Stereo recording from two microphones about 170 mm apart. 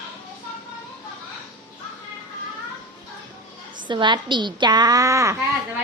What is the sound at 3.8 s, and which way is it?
A woman's voice, 25° right (ahead or behind).